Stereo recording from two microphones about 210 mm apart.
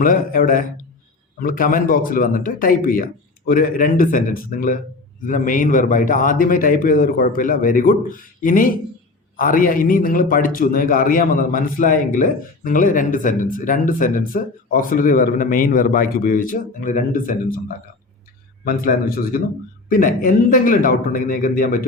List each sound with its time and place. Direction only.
0.0 s a man's voice: 40° left (ahead or behind)